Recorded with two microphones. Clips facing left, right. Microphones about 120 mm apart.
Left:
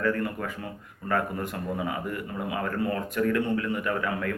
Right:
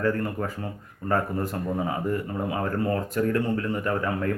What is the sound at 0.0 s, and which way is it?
Speech, 30° right (ahead or behind).